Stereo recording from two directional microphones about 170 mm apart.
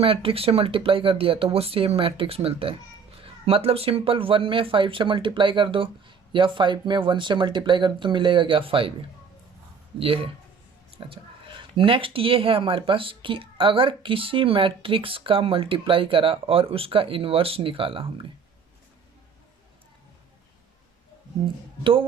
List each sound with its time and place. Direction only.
0.0 s speech: 30° right (ahead or behind)
10.0 s speech: 35° right (ahead or behind)
21.4 s speech: 30° right (ahead or behind)